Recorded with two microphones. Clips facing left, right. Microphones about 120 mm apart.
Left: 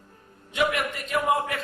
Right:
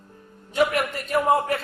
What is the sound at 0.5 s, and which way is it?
A man's voice, 40° right (ahead or behind).